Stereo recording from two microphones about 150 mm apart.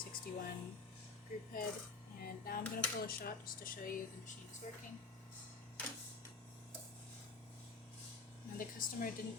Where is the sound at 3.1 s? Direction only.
75° left (ahead or behind).